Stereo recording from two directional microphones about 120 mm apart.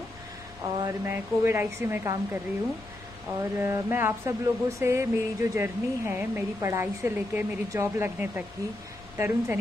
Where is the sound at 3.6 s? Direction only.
20° right (ahead or behind).